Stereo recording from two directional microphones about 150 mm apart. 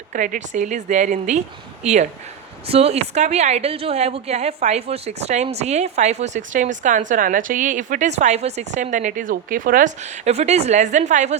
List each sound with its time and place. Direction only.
0.1 s a woman's voice: 65° right (ahead or behind)